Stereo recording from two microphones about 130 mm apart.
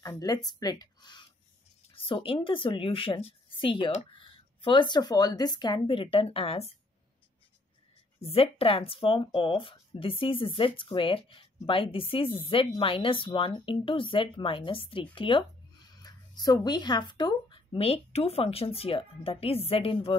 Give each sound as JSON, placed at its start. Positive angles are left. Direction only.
{"t": 0.0, "sound": "speech", "side_deg": 30}
{"t": 2.0, "sound": "speech", "side_deg": 40}
{"t": 8.2, "sound": "speech", "side_deg": 50}
{"t": 16.0, "sound": "speech", "side_deg": 30}